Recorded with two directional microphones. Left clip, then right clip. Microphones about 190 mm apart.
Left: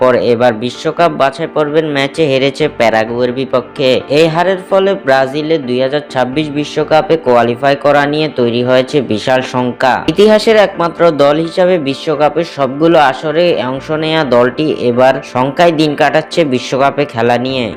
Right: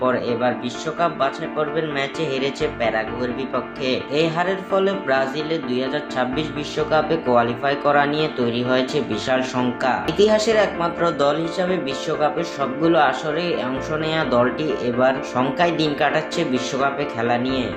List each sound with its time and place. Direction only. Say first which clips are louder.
0.0 s speech: left 11 dB; 45° left (ahead or behind)